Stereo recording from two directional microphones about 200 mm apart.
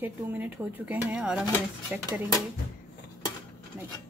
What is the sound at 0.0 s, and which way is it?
Speech, 10° right (ahead or behind).